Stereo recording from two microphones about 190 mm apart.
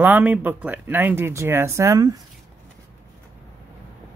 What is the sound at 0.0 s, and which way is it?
Speech, 10° right (ahead or behind).